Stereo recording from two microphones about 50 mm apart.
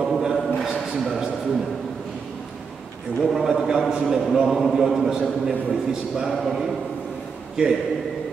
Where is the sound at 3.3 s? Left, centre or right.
Centre.